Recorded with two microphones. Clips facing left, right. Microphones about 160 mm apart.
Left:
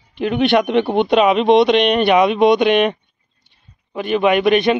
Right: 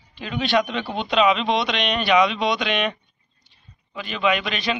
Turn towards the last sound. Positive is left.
turn(degrees=55)  # may be behind; listen again after turning